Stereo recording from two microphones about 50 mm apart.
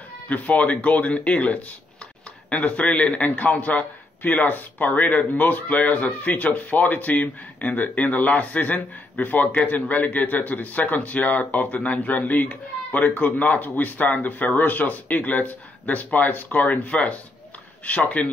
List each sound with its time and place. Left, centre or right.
0.3 s speech: left
16.9 s speech: left